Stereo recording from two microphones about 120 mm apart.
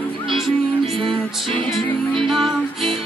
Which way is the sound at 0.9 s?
45° right (ahead or behind).